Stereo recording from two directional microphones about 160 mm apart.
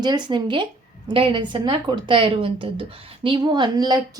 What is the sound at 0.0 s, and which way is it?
Speech, 25° right (ahead or behind).